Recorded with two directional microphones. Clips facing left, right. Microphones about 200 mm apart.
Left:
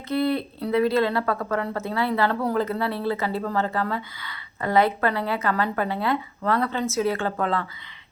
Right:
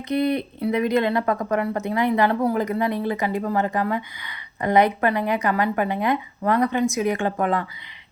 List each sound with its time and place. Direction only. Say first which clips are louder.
0.1 s speech: right 1 dB; 20° right (ahead or behind)